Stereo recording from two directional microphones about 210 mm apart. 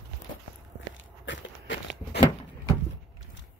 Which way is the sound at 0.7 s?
60° left (ahead or behind).